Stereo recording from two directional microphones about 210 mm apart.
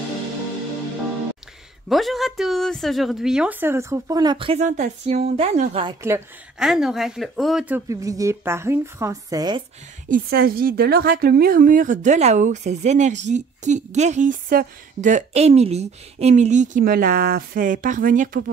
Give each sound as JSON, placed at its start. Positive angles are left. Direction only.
{"t": 1.9, "sound": "a woman's voice", "side_deg": 0}
{"t": 6.6, "sound": "a woman's voice", "side_deg": 0}
{"t": 10.0, "sound": "a woman's voice", "side_deg": -40}